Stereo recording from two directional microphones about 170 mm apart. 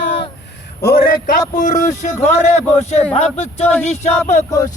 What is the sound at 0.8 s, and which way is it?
A man's voice, 65° left (ahead or behind).